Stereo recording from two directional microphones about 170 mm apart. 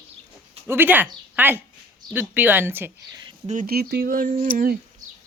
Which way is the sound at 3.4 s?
50° right (ahead or behind).